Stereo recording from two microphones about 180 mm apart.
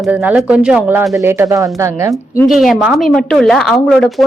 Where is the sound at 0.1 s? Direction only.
10° right (ahead or behind).